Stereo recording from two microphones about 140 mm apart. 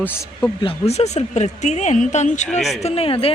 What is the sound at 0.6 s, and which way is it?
Speech, 45° left (ahead or behind).